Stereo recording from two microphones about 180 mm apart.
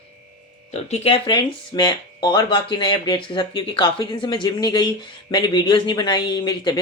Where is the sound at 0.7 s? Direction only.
40° left (ahead or behind).